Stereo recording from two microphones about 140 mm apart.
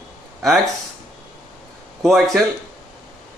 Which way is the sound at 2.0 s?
Centre (ahead or behind).